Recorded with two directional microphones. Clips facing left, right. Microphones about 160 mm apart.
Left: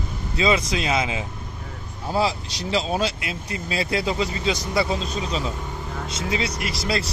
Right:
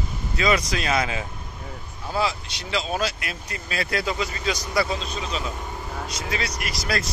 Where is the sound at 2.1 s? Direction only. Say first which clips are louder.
Left 3 dB; 35° left (ahead or behind).